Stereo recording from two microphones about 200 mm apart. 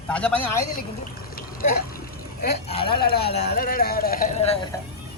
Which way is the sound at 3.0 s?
50° left (ahead or behind).